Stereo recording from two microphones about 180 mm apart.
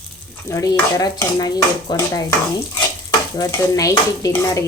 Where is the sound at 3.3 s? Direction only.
20° left (ahead or behind).